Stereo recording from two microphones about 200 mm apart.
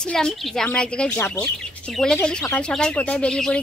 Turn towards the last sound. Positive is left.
turn(degrees=5)  # may be behind; listen again after turning